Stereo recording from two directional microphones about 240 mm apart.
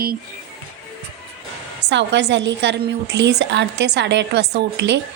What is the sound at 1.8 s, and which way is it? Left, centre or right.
A woman's voice, right.